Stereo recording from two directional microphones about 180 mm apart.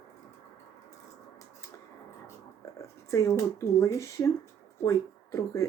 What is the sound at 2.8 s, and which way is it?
Speech, 15° left (ahead or behind).